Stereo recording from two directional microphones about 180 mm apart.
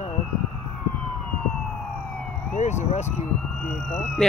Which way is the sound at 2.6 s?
40° left (ahead or behind).